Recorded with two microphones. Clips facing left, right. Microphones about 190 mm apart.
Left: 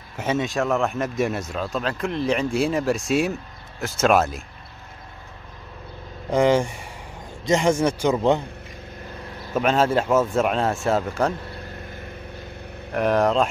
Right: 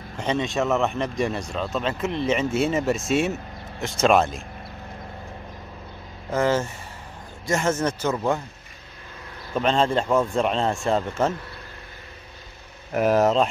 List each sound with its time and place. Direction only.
0.2 s a man's voice: 5° left (ahead or behind)
6.3 s speech: 15° left (ahead or behind)
9.5 s a man's voice: 5° left (ahead or behind)
12.9 s a man's voice: 5° right (ahead or behind)